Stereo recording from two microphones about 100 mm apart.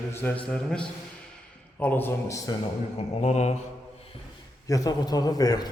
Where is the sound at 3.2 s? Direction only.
90° left.